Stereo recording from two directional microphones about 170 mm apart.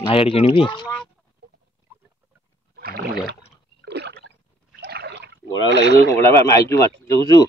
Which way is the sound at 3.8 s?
80° right.